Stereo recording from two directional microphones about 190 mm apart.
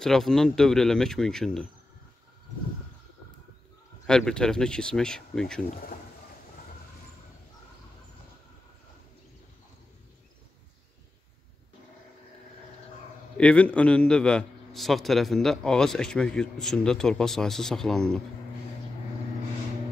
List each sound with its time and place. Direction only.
0.0 s a man's voice: centre (ahead or behind)
4.0 s a man's voice: 5° left (ahead or behind)
5.7 s speech: 40° left (ahead or behind)
13.4 s a man's voice: 5° left (ahead or behind)